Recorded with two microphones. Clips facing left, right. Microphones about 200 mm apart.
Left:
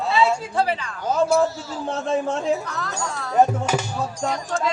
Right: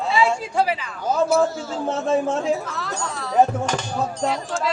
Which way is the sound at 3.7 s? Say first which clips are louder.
Left 2 dB; 10° left (ahead or behind).